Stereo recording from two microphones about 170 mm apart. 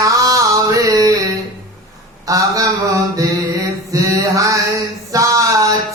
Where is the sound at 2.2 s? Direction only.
20° right (ahead or behind).